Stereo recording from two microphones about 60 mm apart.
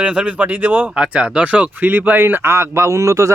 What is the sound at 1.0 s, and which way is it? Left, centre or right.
Speech, centre.